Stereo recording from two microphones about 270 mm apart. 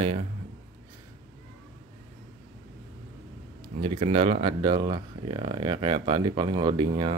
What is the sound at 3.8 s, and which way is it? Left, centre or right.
Speech, right.